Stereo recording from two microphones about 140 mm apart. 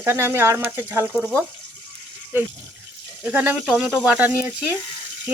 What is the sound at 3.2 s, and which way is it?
Speech, 15° right (ahead or behind).